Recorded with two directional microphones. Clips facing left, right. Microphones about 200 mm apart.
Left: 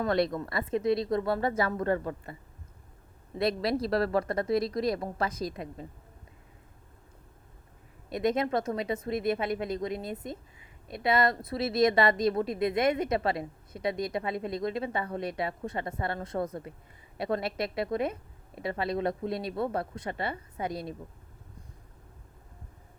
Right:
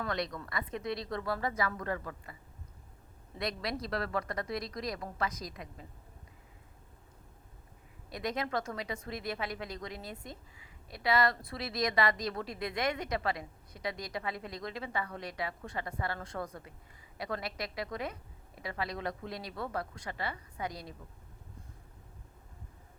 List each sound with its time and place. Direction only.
0.0 s a woman's voice: 30° left (ahead or behind)
3.3 s a woman's voice: 30° left (ahead or behind)
8.1 s a woman's voice: 25° left (ahead or behind)